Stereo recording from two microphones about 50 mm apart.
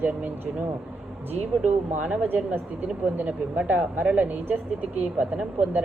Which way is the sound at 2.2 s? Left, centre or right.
Right.